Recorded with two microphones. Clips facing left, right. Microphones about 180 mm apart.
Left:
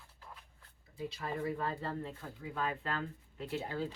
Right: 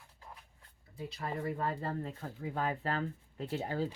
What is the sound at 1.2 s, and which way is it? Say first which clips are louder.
Speech: right 1 dB; 30° right (ahead or behind).